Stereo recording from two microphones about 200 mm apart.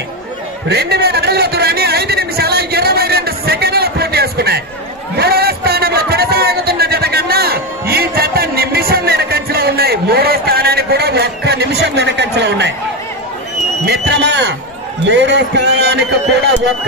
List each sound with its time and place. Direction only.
0.7 s speech: 55° right (ahead or behind)
5.1 s a sound: 50° right (ahead or behind)
13.8 s a man's voice: 55° right (ahead or behind)